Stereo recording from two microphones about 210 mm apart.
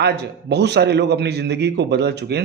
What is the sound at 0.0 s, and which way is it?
A man's voice, 50° right (ahead or behind).